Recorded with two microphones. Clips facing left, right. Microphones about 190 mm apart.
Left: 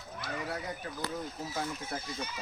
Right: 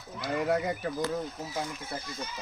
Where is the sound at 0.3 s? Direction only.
65° right (ahead or behind).